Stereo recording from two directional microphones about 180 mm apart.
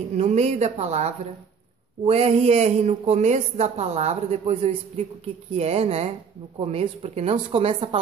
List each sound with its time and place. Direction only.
0.2 s speech: 40° right (ahead or behind)